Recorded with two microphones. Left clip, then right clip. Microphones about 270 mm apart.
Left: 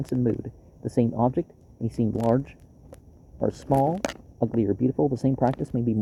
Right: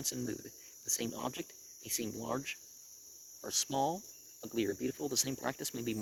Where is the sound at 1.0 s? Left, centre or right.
Right.